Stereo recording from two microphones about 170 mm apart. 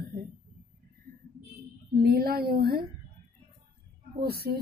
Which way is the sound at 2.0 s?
60° right (ahead or behind).